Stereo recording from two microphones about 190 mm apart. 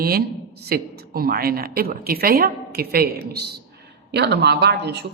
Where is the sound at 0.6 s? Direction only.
55° right (ahead or behind).